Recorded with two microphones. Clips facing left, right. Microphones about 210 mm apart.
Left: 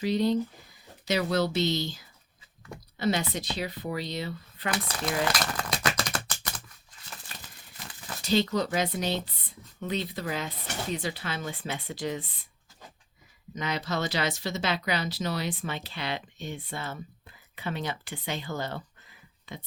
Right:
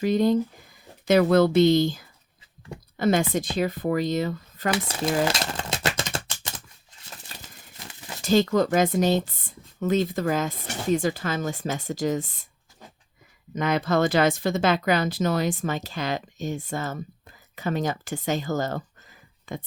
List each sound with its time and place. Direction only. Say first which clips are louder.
0.0 s speech: right 5 dB; 50° right (ahead or behind)
4.7 s a sound: right 6 dB; 25° right (ahead or behind)
8.2 s speech: right 6 dB; 50° right (ahead or behind)
13.6 s speech: right 9 dB; 50° right (ahead or behind)